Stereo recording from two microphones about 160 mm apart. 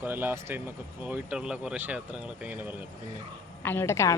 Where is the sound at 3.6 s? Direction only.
15° left (ahead or behind).